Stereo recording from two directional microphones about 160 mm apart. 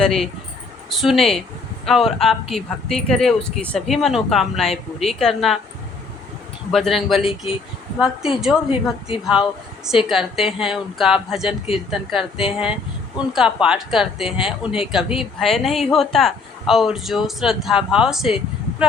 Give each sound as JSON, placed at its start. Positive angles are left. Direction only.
{"t": 0.0, "sound": "speech", "side_deg": 0}
{"t": 6.7, "sound": "speech", "side_deg": 0}
{"t": 8.7, "sound": "speech", "side_deg": 35}
{"t": 9.2, "sound": "speech", "side_deg": -5}
{"t": 11.9, "sound": "speech", "side_deg": 30}
{"t": 12.5, "sound": "speech", "side_deg": -5}